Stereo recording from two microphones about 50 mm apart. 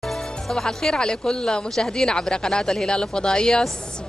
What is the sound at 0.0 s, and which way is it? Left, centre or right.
A man's voice, centre.